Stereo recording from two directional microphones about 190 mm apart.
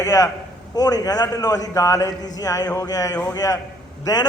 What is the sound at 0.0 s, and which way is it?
A man's voice, 20° left (ahead or behind).